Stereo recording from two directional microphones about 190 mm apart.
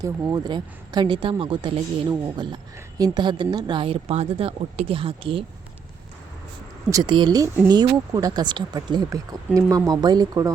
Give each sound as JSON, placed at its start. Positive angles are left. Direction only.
{"t": 0.0, "sound": "speech", "side_deg": -20}
{"t": 6.9, "sound": "speech", "side_deg": -25}